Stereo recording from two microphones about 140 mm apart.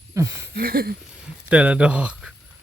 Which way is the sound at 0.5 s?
90° right.